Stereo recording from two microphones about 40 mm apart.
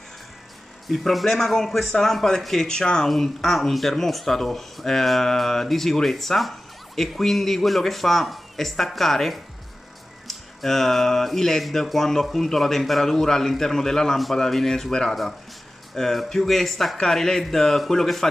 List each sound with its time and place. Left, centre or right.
0.8 s speech: centre
14.9 s speech: centre
15.9 s speech: centre